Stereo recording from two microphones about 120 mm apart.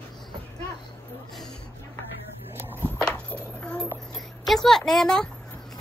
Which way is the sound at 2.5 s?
20° right (ahead or behind).